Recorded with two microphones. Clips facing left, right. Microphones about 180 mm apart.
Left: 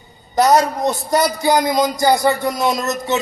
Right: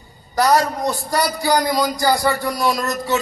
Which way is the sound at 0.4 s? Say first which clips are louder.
Left 3 dB; 20° left (ahead or behind).